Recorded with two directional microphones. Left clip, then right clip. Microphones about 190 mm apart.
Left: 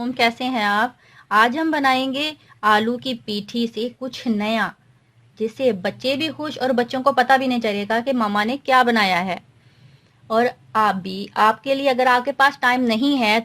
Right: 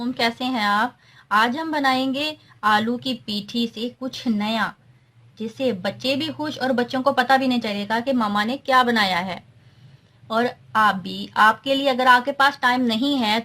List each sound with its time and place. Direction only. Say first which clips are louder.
0.0 s a woman's voice: left 3 dB; 40° left (ahead or behind)